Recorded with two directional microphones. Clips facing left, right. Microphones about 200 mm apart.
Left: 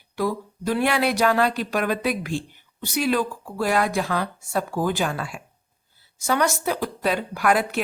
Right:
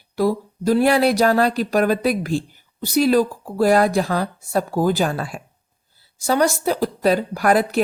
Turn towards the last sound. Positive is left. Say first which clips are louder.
# right 4 dB
turn(degrees=-40)  # may be behind; listen again after turning